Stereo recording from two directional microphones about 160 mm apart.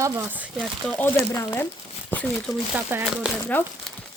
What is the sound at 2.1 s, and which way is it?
Crumpling, 10° left (ahead or behind).